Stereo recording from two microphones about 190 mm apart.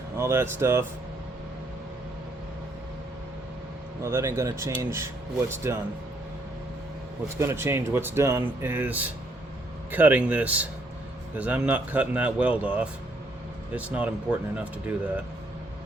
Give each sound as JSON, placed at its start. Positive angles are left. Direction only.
{"t": 0.2, "sound": "speech", "side_deg": -15}
{"t": 4.0, "sound": "speech", "side_deg": -15}
{"t": 7.3, "sound": "speech", "side_deg": -15}